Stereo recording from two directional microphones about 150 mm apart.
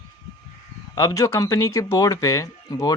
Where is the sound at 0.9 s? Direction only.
20° left (ahead or behind).